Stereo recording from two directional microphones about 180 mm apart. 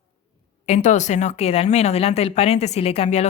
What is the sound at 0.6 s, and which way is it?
A woman's voice, 40° left (ahead or behind).